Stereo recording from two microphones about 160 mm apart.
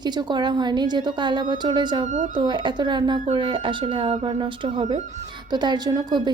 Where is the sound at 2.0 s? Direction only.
50° right (ahead or behind).